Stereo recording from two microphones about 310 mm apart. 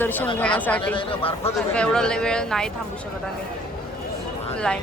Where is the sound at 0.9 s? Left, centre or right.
Centre.